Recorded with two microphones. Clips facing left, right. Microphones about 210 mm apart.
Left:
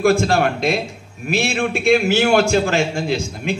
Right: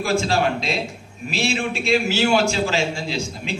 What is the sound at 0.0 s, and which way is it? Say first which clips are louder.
A man's voice: left 5 dB; 55° left (ahead or behind).